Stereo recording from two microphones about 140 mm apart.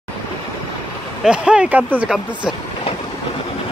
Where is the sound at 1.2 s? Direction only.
5° right (ahead or behind).